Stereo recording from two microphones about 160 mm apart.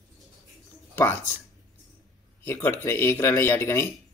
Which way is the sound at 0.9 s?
15° left (ahead or behind).